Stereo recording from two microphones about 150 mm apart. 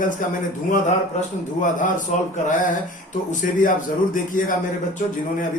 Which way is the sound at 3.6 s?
65° left (ahead or behind).